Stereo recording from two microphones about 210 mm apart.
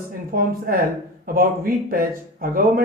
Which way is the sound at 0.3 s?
40° right (ahead or behind).